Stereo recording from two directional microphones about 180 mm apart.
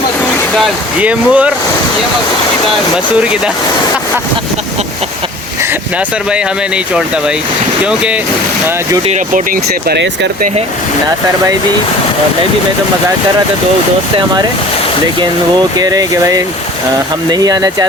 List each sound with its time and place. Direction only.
0.5 s speech: 5° right (ahead or behind)
7.9 s speech: 5° right (ahead or behind)
9.0 s speech: 45° right (ahead or behind)
15.8 s speech: 20° right (ahead or behind)